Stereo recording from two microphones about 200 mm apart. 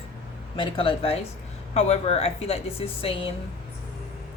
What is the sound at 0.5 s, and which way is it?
A woman's voice, 25° left (ahead or behind).